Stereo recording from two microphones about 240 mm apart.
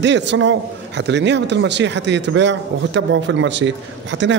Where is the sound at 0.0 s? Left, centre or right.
Right.